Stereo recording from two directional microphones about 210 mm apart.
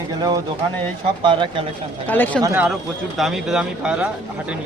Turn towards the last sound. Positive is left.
turn(degrees=-5)  # may be behind; listen again after turning